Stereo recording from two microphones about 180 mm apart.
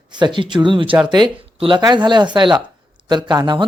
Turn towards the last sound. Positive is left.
turn(degrees=-25)  # may be behind; listen again after turning